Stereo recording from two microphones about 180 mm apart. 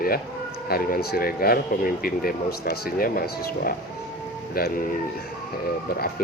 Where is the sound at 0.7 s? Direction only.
55° left (ahead or behind).